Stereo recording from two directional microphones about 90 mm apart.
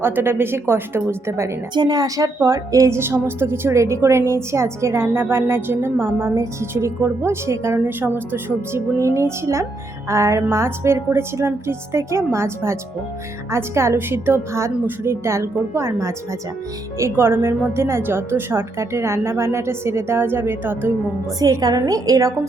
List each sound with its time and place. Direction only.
0.0 s a woman's voice: 25° right (ahead or behind)
1.7 s a woman's voice: 50° right (ahead or behind); by 20.9 s 25° right (ahead or behind)
21.3 s a woman's voice: 45° right (ahead or behind)